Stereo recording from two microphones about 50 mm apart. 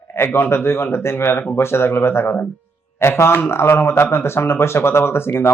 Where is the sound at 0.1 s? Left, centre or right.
Left.